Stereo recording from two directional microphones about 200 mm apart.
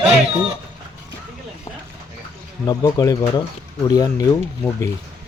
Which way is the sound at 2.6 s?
20° left (ahead or behind).